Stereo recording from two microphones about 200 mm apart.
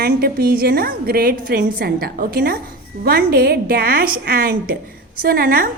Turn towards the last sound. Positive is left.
turn(degrees=-45)  # may be behind; listen again after turning